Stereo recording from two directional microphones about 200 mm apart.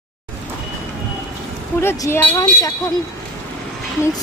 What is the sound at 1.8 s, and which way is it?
Speech, 15° left (ahead or behind).